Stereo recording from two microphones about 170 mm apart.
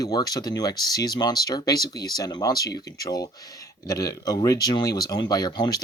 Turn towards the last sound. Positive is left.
turn(degrees=25)  # may be behind; listen again after turning